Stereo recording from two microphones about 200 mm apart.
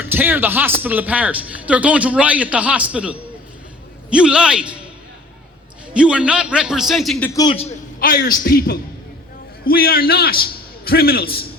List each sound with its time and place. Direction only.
0.0 s a man's voice: 10° right (ahead or behind)
5.9 s a man's voice: 5° right (ahead or behind)
7.3 s a man's voice: 20° left (ahead or behind)
7.9 s a man's voice: 50° left (ahead or behind)